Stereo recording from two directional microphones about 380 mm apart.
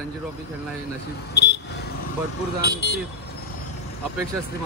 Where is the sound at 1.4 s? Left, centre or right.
Left.